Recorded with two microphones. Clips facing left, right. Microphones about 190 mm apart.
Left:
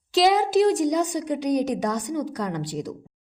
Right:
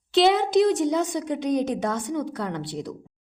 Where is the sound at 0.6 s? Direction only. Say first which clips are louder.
Left 1 dB; 35° left (ahead or behind).